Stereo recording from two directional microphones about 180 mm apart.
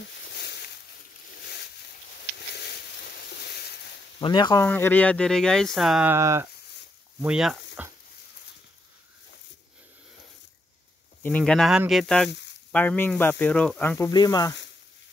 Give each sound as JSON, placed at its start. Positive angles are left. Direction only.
{"t": 0.3, "sound": "a sound", "side_deg": 65}
{"t": 2.3, "sound": "a sound", "side_deg": 65}
{"t": 4.2, "sound": "speech", "side_deg": 25}
{"t": 4.6, "sound": "speech", "side_deg": 10}
{"t": 6.1, "sound": "speech", "side_deg": -15}
{"t": 7.2, "sound": "speech", "side_deg": -5}
{"t": 11.2, "sound": "speech", "side_deg": 5}